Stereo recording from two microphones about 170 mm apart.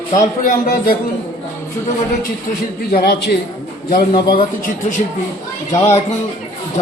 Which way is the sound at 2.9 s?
65° left (ahead or behind).